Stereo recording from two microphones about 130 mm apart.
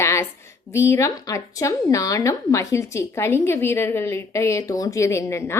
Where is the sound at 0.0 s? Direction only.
20° left (ahead or behind).